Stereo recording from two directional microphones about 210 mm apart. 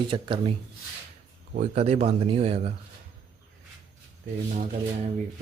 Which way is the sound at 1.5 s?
30° right (ahead or behind).